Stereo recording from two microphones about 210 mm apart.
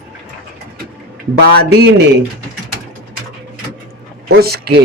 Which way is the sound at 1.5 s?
50° right (ahead or behind).